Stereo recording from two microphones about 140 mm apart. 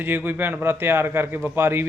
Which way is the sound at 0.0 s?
15° right (ahead or behind).